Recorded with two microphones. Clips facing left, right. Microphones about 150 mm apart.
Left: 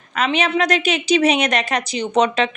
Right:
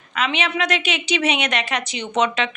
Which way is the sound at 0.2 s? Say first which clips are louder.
Left 4 dB; 40° left (ahead or behind).